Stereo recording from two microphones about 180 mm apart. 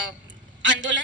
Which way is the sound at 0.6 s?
90° right.